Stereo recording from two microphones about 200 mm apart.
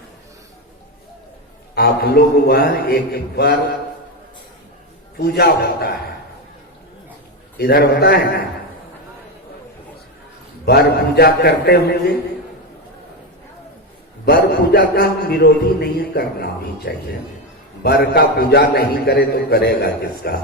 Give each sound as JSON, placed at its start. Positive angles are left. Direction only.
{"t": 1.7, "sound": "a man's voice", "side_deg": 50}
{"t": 5.1, "sound": "a man's voice", "side_deg": 50}
{"t": 7.6, "sound": "a man's voice", "side_deg": 50}
{"t": 10.7, "sound": "a man's voice", "side_deg": 50}
{"t": 14.3, "sound": "a man's voice", "side_deg": 50}